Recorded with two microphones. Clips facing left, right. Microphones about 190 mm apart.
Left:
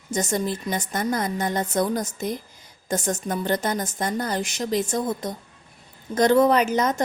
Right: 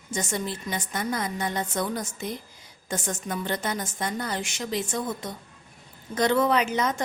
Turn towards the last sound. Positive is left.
turn(degrees=40)  # may be behind; listen again after turning